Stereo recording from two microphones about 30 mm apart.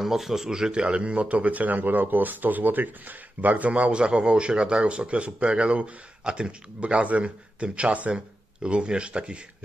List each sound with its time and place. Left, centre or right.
0.0 s speech: centre
0.7 s speech: right
3.9 s speech: right
6.8 s speech: right
8.6 s speech: right